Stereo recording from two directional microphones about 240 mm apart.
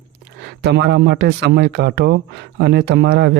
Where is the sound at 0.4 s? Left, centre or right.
Right.